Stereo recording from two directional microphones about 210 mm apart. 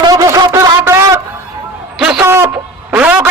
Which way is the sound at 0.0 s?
15° right (ahead or behind).